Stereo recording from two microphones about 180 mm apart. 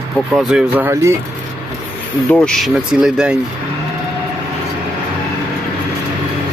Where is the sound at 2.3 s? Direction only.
5° left (ahead or behind).